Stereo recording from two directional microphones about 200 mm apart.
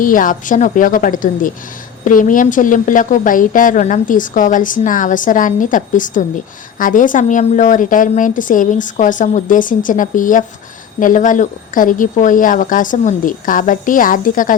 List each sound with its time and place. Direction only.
0.0 s a woman's voice: 45° left (ahead or behind)